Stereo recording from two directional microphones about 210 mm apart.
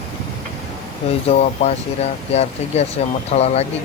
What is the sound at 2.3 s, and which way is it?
Speech, 30° left (ahead or behind).